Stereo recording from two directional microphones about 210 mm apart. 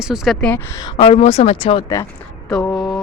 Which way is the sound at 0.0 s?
Centre (ahead or behind).